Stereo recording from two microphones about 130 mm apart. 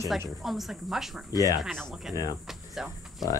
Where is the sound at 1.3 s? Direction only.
25° left (ahead or behind).